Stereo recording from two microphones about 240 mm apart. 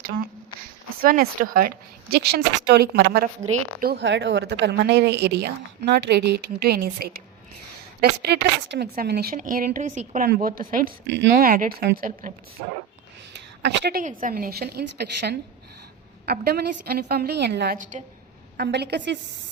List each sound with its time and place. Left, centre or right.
1.0 s speech: right
8.2 s speech: right
13.6 s speech: right
14.0 s speech: right